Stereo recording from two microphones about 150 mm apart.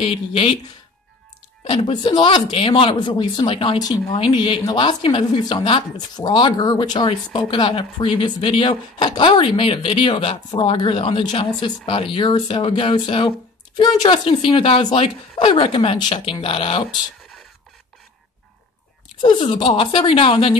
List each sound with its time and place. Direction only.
0.0 s speech: 40° left (ahead or behind)
1.6 s speech: 35° left (ahead or behind)
19.2 s speech: 30° left (ahead or behind)